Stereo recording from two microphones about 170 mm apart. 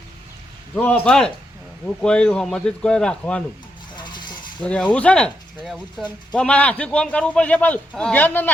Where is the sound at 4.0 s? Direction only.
25° left (ahead or behind).